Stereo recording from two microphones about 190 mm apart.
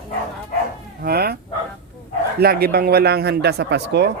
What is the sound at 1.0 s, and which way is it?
Speech, 55° right (ahead or behind).